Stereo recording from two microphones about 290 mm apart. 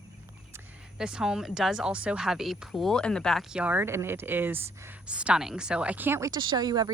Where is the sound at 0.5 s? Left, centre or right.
Centre.